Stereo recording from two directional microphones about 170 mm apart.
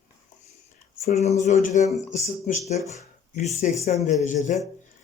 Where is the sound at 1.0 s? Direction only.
40° left (ahead or behind).